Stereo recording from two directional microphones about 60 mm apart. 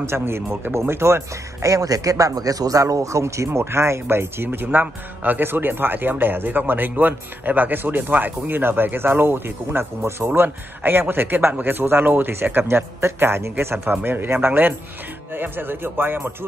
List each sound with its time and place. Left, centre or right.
0.0 s speech: right